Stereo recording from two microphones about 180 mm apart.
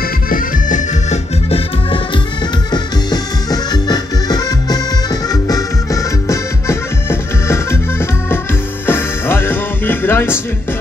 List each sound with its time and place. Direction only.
0.3 s accordion: 45° left (ahead or behind)
2.7 s music: 20° left (ahead or behind)
8.8 s music: 10° left (ahead or behind)